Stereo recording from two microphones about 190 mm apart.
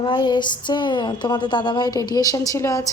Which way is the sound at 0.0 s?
25° left (ahead or behind).